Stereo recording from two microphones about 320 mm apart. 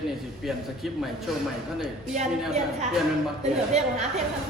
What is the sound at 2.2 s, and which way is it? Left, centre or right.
Speech, centre.